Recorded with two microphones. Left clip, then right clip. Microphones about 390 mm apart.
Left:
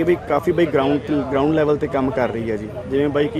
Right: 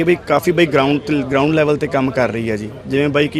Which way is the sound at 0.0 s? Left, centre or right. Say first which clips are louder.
Right 3 dB; right.